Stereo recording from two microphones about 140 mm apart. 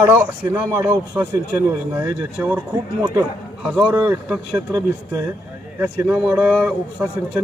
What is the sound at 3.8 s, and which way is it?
Speech, 15° right (ahead or behind).